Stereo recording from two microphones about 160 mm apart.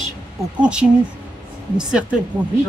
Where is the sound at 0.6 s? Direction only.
5° right (ahead or behind).